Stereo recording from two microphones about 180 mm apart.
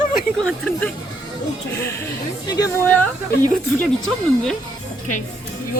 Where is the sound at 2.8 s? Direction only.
5° left (ahead or behind).